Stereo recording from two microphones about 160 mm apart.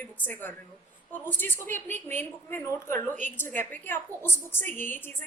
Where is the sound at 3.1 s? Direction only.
50° right (ahead or behind).